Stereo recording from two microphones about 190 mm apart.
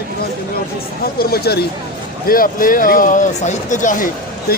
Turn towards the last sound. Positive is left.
turn(degrees=55)  # may be behind; listen again after turning